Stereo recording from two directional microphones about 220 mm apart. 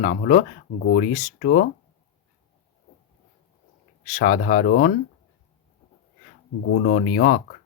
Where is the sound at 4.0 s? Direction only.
35° left (ahead or behind).